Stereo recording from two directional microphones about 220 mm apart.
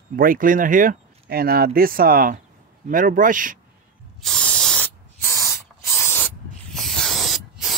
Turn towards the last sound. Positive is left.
turn(degrees=0)  # may be behind; listen again after turning